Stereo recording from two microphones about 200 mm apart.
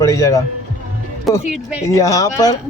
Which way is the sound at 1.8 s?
15° left (ahead or behind).